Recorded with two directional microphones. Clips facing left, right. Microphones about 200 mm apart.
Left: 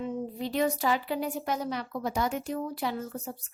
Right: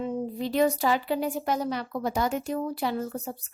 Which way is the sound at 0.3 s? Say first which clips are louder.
Right 4 dB; 35° right (ahead or behind).